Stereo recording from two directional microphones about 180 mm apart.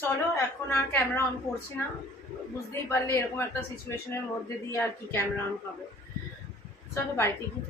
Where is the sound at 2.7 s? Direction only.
15° left (ahead or behind).